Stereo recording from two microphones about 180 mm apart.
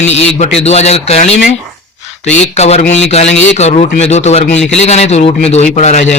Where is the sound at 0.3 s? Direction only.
35° left (ahead or behind).